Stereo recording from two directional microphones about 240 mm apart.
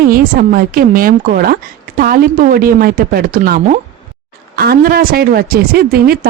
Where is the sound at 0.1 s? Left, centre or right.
Right.